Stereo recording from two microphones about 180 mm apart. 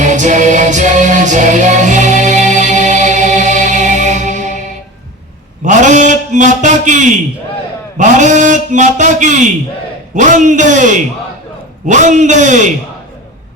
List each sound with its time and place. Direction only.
0.0 s music: 40° right (ahead or behind)
5.6 s a sound: 45° right (ahead or behind)
7.9 s a man's voice: 45° right (ahead or behind)